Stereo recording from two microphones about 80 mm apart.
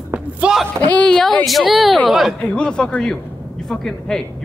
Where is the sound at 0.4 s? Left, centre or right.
Centre.